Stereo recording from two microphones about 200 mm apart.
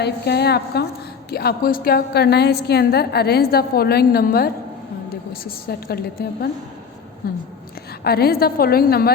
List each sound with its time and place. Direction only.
0.0 s a woman's voice: 55° left (ahead or behind)
8.0 s a woman's voice: 50° left (ahead or behind)